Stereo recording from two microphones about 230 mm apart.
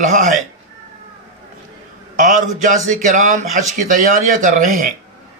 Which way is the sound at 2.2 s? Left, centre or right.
Right.